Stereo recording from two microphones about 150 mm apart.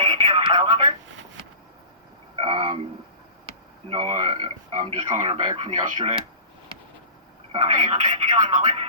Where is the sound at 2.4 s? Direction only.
30° right (ahead or behind).